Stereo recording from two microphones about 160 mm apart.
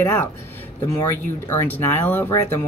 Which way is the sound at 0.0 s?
15° left (ahead or behind).